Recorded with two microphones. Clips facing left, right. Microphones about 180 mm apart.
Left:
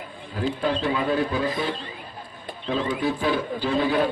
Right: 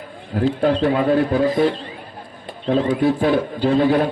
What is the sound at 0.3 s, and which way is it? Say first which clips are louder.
A man's voice: right 7 dB; 55° right (ahead or behind).